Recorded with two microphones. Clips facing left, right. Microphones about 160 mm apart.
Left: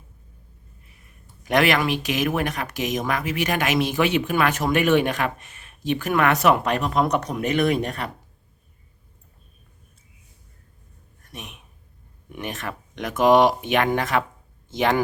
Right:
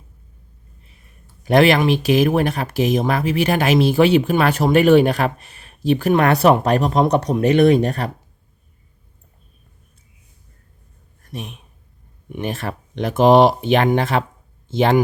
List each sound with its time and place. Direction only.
1.5 s speech: 30° right (ahead or behind)
11.3 s speech: 30° right (ahead or behind)